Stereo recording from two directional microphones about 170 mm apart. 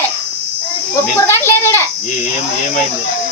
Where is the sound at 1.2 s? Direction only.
15° left (ahead or behind).